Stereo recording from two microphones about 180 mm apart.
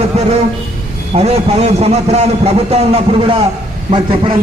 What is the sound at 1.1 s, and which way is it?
A man's voice, 35° right (ahead or behind).